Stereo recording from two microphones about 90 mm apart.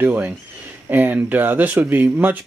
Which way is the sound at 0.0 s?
20° right (ahead or behind).